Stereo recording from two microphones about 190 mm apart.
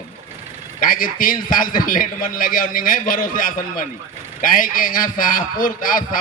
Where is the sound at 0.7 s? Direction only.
45° left (ahead or behind).